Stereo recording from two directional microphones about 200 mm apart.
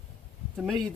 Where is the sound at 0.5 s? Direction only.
Centre (ahead or behind).